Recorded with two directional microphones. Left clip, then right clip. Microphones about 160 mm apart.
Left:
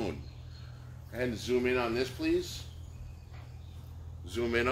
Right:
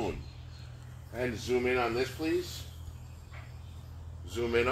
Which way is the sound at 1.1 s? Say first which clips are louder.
Even; 10° left (ahead or behind).